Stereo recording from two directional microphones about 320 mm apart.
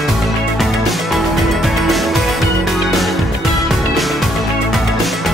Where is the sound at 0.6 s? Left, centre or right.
Centre.